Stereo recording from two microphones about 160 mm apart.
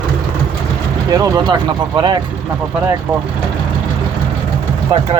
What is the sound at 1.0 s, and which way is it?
Speech, 25° right (ahead or behind).